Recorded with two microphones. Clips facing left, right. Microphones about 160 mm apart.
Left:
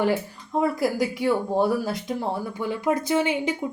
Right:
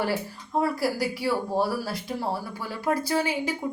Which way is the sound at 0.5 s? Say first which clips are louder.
Left 2 dB; 20° left (ahead or behind).